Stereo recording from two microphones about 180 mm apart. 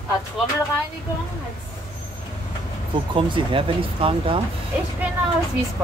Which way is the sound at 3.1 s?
30° right (ahead or behind).